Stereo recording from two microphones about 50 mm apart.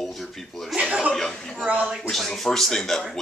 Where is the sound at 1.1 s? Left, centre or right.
Centre.